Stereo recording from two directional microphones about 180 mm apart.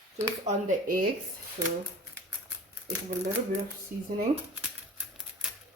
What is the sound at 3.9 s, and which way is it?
Speech, 50° right (ahead or behind).